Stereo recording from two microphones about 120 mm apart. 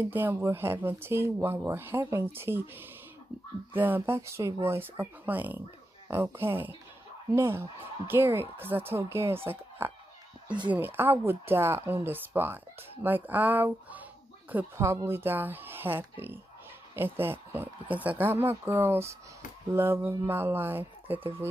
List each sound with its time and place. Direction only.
0.0 s speech: 15° right (ahead or behind)